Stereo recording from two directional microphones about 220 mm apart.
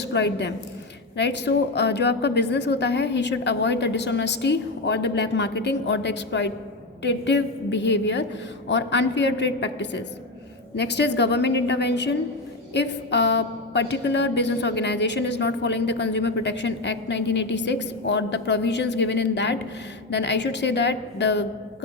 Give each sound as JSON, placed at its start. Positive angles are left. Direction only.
{"t": 0.0, "sound": "a woman's voice", "side_deg": 50}